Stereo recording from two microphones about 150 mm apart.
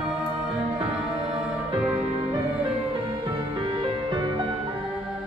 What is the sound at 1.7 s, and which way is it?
Music, 45° right (ahead or behind).